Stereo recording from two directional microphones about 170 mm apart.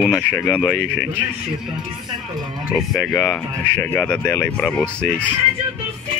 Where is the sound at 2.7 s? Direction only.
5° left (ahead or behind).